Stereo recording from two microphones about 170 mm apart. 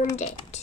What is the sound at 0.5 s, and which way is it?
Music, 40° left (ahead or behind).